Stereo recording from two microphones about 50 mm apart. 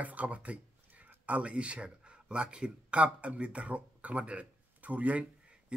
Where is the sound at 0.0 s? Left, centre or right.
Right.